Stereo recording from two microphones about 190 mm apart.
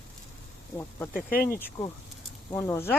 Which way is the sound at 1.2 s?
50° left (ahead or behind).